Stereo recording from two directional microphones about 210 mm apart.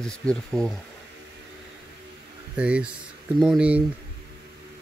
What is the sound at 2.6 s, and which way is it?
Speech, 5° right (ahead or behind).